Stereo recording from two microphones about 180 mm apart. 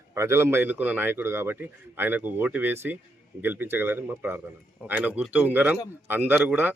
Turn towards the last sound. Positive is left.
turn(degrees=-10)  # may be behind; listen again after turning